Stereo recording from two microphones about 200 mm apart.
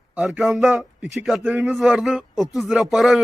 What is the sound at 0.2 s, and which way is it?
A man's voice, centre (ahead or behind).